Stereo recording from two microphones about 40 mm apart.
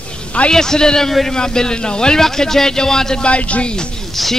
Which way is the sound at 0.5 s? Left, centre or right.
Centre.